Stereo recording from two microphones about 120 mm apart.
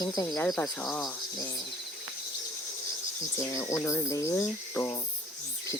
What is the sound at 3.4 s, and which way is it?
Speech, 25° left (ahead or behind).